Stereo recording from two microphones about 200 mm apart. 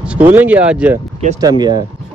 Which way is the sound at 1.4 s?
20° right (ahead or behind).